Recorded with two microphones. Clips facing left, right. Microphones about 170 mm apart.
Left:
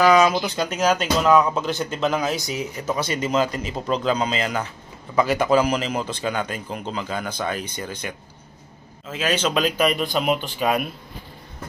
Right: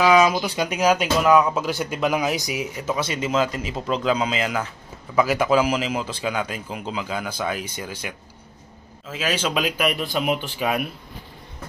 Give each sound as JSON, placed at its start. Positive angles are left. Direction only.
{"t": 0.0, "sound": "a man's voice", "side_deg": -5}